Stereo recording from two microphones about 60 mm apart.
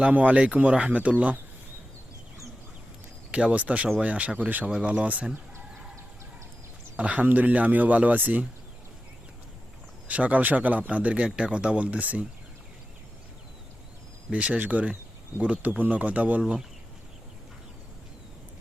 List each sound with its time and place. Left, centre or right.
0.0 s speech: right
3.3 s speech: right
4.7 s speech: centre
6.9 s speech: right
10.1 s speech: right
14.3 s speech: right
16.4 s speech: centre